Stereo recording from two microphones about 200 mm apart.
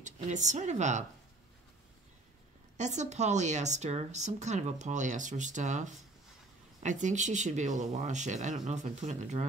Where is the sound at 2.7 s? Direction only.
35° right (ahead or behind).